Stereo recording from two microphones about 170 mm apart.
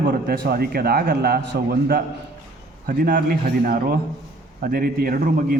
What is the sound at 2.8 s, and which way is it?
A man's voice, 55° right (ahead or behind).